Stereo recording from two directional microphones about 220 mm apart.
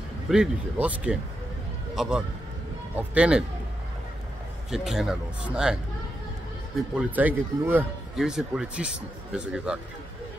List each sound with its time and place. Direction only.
0.3 s a man's voice: 5° right (ahead or behind)
4.6 s a man's voice: centre (ahead or behind)
7.0 s a man's voice: 5° right (ahead or behind)